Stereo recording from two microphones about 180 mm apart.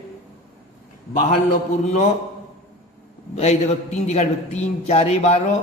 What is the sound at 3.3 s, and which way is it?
Mantra, 35° left (ahead or behind).